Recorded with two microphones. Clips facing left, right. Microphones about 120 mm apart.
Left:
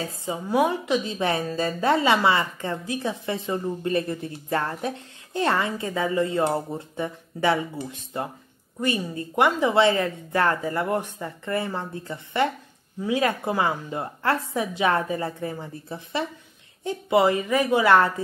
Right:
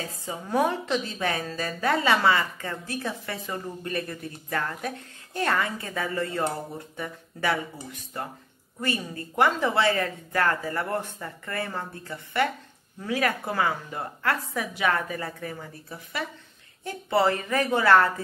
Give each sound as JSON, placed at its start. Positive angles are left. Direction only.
{"t": 0.0, "sound": "a woman's voice", "side_deg": 25}